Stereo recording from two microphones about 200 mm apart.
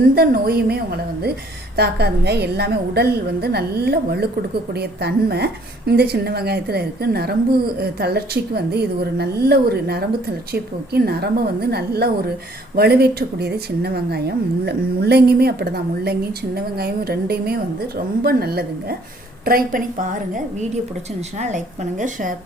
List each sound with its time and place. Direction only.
0.1 s a woman's voice: 50° right (ahead or behind)